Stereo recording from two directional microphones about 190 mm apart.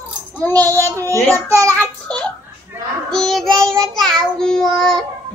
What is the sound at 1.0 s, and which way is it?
Child singing, 10° left (ahead or behind).